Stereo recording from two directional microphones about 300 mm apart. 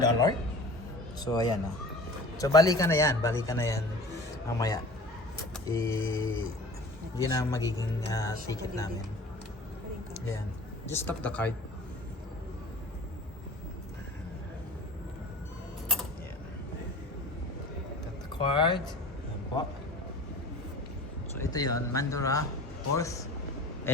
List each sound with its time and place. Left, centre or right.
0.0 s a man's voice: centre
10.8 s speech: centre
18.3 s a man's voice: centre
21.3 s a man's voice: centre